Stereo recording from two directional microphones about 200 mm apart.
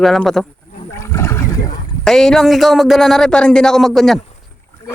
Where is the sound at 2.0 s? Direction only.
Centre (ahead or behind).